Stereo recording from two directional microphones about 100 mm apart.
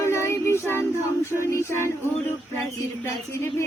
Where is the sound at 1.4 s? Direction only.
25° left (ahead or behind).